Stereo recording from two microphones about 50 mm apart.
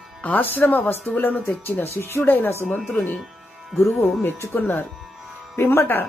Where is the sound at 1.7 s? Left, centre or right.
Left.